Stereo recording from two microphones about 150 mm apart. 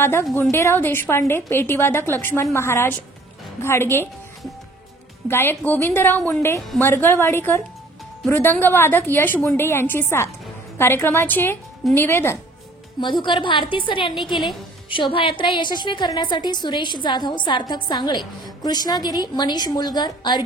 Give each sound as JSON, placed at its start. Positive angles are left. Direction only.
{"t": 0.0, "sound": "a woman's voice", "side_deg": 15}
{"t": 5.3, "sound": "a woman's voice", "side_deg": 15}
{"t": 13.0, "sound": "a woman's voice", "side_deg": 30}
{"t": 14.1, "sound": "a woman's voice", "side_deg": 0}
{"t": 14.9, "sound": "a woman's voice", "side_deg": 35}